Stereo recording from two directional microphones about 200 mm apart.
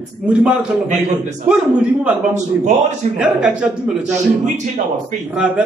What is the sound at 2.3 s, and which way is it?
Speech, 35° right (ahead or behind).